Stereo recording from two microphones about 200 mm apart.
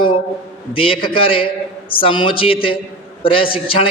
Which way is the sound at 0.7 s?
25° left (ahead or behind).